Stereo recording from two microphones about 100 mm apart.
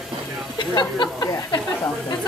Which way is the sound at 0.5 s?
50° left (ahead or behind).